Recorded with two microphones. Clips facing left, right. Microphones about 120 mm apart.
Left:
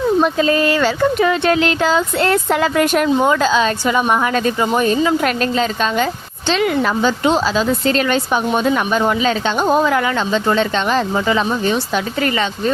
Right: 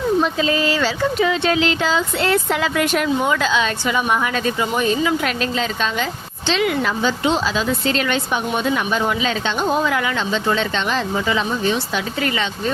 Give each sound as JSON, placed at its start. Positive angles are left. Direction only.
{"t": 0.2, "sound": "speech", "side_deg": 45}